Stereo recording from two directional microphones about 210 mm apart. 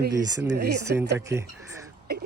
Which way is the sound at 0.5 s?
50° right (ahead or behind).